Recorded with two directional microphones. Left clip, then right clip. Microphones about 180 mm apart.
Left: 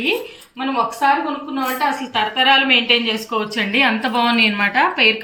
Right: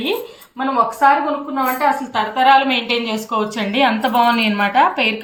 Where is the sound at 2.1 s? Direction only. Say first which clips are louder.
Right 2 dB; 50° right (ahead or behind).